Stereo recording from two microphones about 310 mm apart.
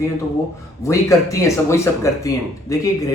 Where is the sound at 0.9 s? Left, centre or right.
Centre.